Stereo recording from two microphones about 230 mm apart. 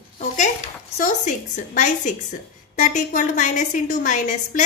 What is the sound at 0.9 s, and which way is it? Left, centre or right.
A woman's voice, left.